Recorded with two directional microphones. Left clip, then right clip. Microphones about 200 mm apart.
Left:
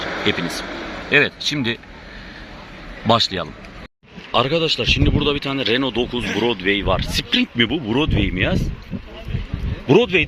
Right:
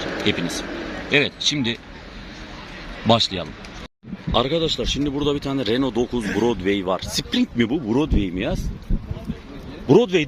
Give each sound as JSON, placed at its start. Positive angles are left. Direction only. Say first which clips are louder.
{"t": 0.0, "sound": "a sound", "louder": "left 2 dB", "side_deg": -35}
{"t": 1.1, "sound": "speech", "louder": "left 3 dB", "side_deg": 0}
{"t": 3.1, "sound": "speech", "louder": "left 2 dB", "side_deg": 0}
{"t": 9.8, "sound": "speech", "louder": "left 1 dB", "side_deg": -5}